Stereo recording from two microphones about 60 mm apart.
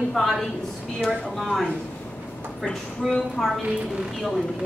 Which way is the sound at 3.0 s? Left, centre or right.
Centre.